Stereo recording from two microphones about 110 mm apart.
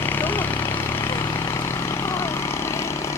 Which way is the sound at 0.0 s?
20° left (ahead or behind).